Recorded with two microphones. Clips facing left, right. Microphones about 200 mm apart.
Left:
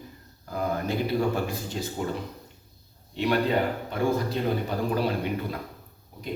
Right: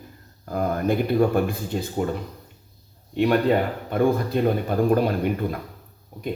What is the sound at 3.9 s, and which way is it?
A man's voice, 55° right (ahead or behind).